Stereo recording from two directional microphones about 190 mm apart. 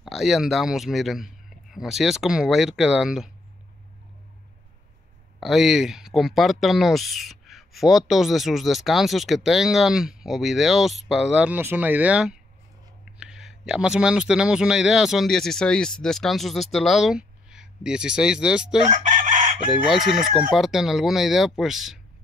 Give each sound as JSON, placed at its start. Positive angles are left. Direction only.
{"t": 0.0, "sound": "speech", "side_deg": 0}
{"t": 5.4, "sound": "speech", "side_deg": 0}
{"t": 18.9, "sound": "chicken", "side_deg": -40}
{"t": 20.2, "sound": "speech", "side_deg": 0}